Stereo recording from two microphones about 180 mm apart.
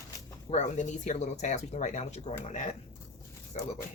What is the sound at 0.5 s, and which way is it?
Speech, 40° left (ahead or behind).